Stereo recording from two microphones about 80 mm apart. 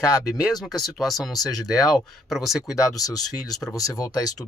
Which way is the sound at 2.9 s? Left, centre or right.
Left.